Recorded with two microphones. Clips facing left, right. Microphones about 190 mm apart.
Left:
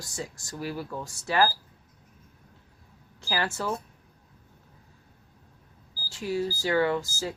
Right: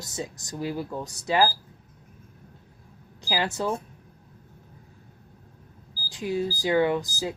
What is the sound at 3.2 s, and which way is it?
Speech, 15° right (ahead or behind).